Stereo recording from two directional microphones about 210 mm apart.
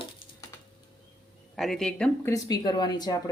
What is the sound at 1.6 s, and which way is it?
Speech, centre (ahead or behind).